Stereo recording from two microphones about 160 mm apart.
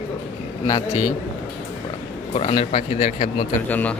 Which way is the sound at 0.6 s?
30° left (ahead or behind).